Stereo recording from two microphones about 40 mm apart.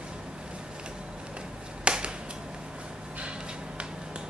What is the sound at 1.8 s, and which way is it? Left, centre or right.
Finger snapping, right.